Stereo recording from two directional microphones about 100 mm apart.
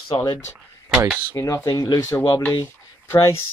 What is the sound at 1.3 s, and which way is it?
Speech, 25° left (ahead or behind).